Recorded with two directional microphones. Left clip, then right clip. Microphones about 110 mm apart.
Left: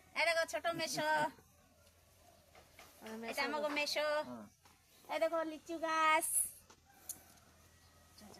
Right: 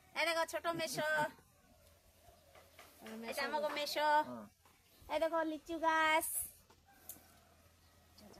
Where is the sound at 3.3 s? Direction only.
20° right (ahead or behind).